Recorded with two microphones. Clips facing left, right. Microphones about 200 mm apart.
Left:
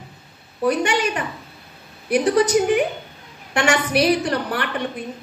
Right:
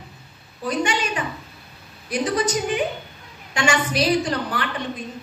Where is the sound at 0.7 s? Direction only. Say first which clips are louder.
Left 4 dB; 60° left (ahead or behind).